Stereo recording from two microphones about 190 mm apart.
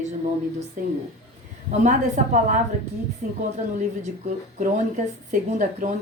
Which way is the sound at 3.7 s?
40° right (ahead or behind).